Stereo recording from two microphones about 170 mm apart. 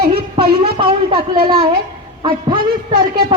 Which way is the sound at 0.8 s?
30° right (ahead or behind).